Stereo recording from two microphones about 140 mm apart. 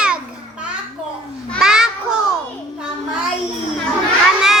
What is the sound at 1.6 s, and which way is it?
Child singing, 5° right (ahead or behind).